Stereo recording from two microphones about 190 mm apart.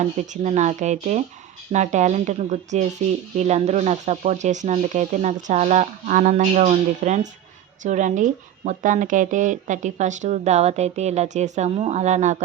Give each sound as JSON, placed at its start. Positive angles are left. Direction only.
{"t": 0.2, "sound": "speech", "side_deg": -40}